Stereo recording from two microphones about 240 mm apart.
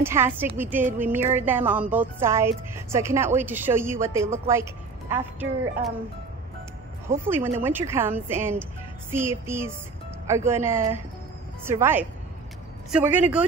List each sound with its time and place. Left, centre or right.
0.0 s a woman's voice: centre
7.1 s a woman's voice: centre